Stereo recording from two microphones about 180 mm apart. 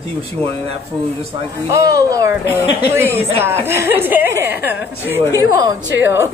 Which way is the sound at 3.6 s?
15° right (ahead or behind).